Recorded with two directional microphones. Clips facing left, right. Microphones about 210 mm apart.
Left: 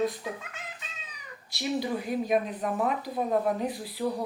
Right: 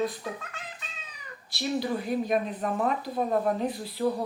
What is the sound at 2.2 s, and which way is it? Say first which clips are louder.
Speech: even; 5° left (ahead or behind).